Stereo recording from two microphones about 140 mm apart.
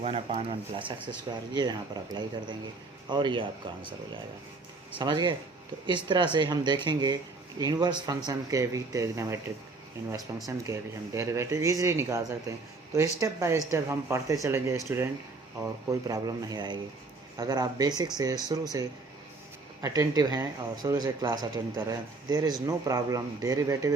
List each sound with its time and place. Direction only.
0.0 s speech: 45° right (ahead or behind)
1.5 s speech: 30° right (ahead or behind)
3.1 s speech: 35° right (ahead or behind)
4.9 s speech: 35° right (ahead or behind)